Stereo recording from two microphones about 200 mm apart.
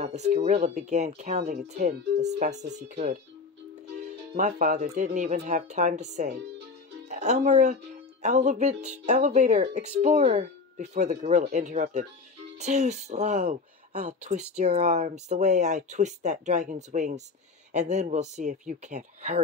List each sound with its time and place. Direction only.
0.0 s speech: 35° right (ahead or behind)
4.4 s speech: 35° right (ahead or behind)